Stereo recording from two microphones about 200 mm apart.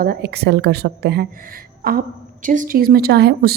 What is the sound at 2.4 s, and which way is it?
A woman's voice, 40° right (ahead or behind).